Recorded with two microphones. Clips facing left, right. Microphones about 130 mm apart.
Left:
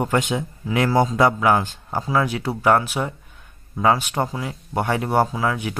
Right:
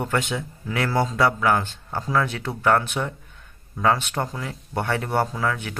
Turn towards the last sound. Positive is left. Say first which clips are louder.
# left 3 dB
turn(degrees=15)  # may be behind; listen again after turning